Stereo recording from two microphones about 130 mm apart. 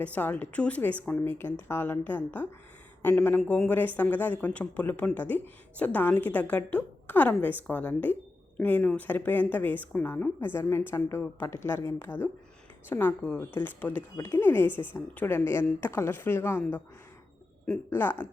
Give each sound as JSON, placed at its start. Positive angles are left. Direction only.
{"t": 0.0, "sound": "speech", "side_deg": 10}